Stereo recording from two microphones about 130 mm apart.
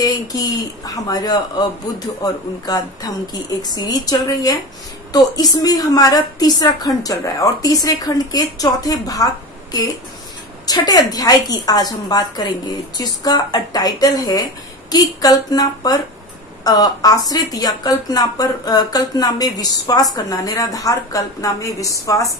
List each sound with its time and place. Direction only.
0.0 s a woman's voice: 25° left (ahead or behind)